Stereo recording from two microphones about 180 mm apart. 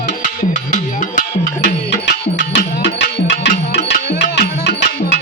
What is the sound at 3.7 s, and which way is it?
Music, 80° left.